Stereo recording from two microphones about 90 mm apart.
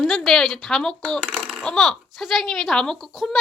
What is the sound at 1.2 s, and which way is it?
Speech, 20° right (ahead or behind).